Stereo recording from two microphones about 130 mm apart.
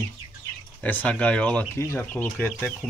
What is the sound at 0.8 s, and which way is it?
Speech, 10° left (ahead or behind).